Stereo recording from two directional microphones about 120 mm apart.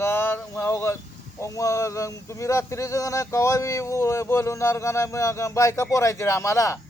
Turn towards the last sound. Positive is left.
turn(degrees=25)  # may be behind; listen again after turning